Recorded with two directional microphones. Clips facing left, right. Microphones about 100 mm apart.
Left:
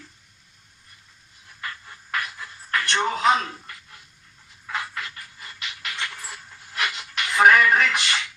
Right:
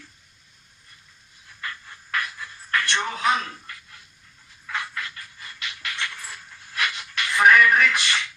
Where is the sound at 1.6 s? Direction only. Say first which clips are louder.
Even; 20° left (ahead or behind).